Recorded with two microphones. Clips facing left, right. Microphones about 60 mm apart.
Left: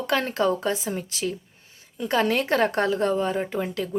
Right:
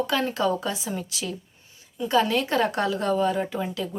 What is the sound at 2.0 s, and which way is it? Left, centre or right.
Speech, left.